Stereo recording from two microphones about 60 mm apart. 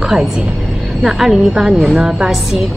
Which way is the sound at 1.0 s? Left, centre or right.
Centre.